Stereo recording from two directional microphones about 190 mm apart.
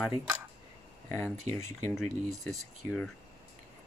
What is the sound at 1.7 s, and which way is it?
Speech, 15° left (ahead or behind).